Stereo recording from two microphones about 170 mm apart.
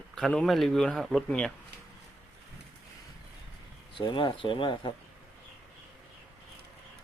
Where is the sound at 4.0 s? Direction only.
25° left (ahead or behind).